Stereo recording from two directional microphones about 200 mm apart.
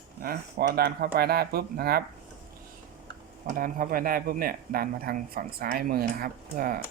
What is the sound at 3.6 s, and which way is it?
Speech, 45° right (ahead or behind).